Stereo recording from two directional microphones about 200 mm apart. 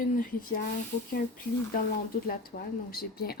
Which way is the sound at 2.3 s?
45° left (ahead or behind).